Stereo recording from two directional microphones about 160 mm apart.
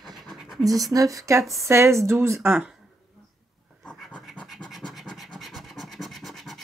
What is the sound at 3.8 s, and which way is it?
Scratch, centre (ahead or behind).